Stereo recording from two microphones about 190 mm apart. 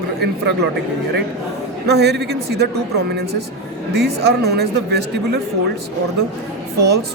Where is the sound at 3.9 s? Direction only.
60° right (ahead or behind).